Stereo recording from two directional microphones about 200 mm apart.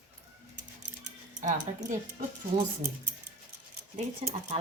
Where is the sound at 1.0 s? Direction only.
40° right (ahead or behind).